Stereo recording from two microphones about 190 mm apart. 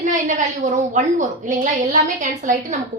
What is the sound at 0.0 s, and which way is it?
A woman's voice, 40° right (ahead or behind).